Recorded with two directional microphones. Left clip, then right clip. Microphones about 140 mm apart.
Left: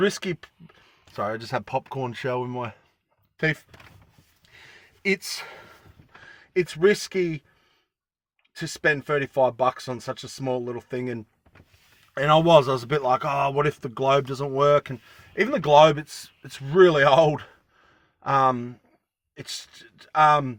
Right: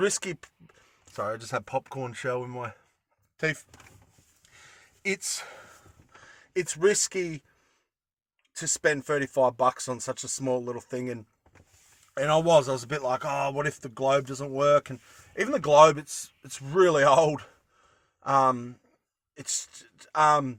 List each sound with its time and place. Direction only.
0.0 s speech: 15° left (ahead or behind); by 3.7 s 35° left (ahead or behind)
4.4 s a sound: 30° left (ahead or behind)
6.1 s speech: 20° left (ahead or behind)
8.5 s speech: 15° left (ahead or behind)
12.1 s speech: 30° left (ahead or behind)